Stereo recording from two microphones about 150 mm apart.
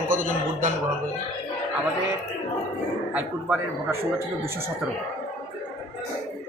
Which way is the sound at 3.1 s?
10° right (ahead or behind).